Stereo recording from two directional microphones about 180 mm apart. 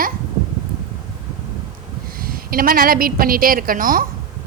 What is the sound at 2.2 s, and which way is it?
A woman's voice, 55° right (ahead or behind).